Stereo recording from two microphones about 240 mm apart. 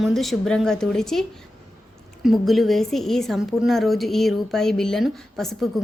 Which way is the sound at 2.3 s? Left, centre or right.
Centre.